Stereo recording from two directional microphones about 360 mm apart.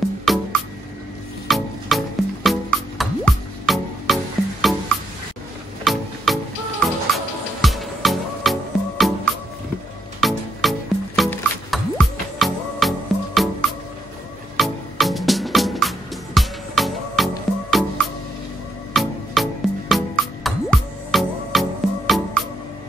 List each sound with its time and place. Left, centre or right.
0.2 s music: centre
7.6 s music: centre